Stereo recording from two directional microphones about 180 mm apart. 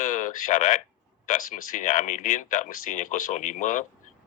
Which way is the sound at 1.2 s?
45° left (ahead or behind).